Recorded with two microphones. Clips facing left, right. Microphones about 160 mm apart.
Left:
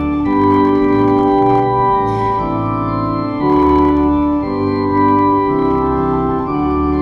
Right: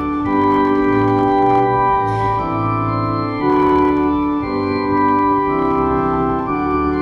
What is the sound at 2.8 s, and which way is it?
Organ, 35° left (ahead or behind).